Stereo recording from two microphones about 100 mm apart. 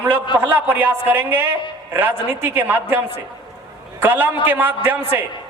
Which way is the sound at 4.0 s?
20° right (ahead or behind).